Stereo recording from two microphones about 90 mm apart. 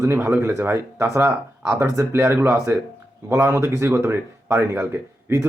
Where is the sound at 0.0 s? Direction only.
30° right (ahead or behind).